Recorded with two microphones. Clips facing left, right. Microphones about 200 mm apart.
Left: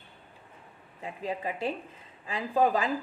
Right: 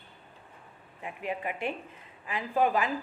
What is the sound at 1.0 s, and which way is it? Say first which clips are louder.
A woman's voice: left 1 dB; 35° left (ahead or behind).